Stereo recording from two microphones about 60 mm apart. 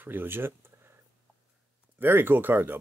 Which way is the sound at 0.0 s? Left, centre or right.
Right.